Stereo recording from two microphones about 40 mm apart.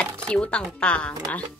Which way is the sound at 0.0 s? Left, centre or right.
Left.